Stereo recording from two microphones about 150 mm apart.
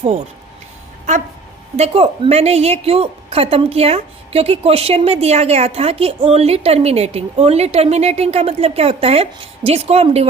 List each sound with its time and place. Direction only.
1.7 s a woman's voice: 40° right (ahead or behind)